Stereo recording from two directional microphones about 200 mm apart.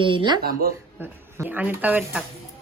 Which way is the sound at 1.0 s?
10° right (ahead or behind).